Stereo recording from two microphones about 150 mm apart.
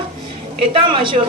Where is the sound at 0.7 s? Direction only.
35° right (ahead or behind).